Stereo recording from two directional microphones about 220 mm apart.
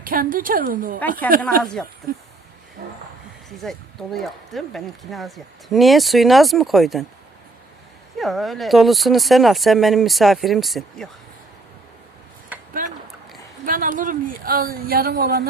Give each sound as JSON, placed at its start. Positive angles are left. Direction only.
{"t": 0.0, "sound": "speech", "side_deg": -40}
{"t": 2.1, "sound": "speech", "side_deg": -40}
{"t": 2.8, "sound": "a sound", "side_deg": -45}
{"t": 3.6, "sound": "speech", "side_deg": 0}
{"t": 8.2, "sound": "speech", "side_deg": 0}
{"t": 12.8, "sound": "a sound", "side_deg": -40}
{"t": 13.7, "sound": "speech", "side_deg": -40}